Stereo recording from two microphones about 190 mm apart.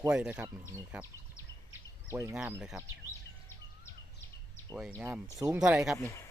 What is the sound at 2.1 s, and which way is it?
Speech, 15° right (ahead or behind).